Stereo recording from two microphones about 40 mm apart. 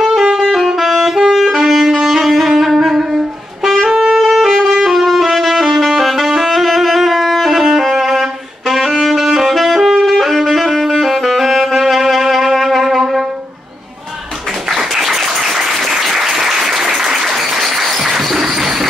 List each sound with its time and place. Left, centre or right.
0.0 s saxophone: centre
3.9 s saxophone: centre
4.2 s music: centre
4.8 s saxophone: centre
14.7 s applause: centre
18.4 s a sound: centre